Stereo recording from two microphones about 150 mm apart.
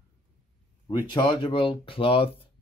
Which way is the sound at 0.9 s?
30° left (ahead or behind).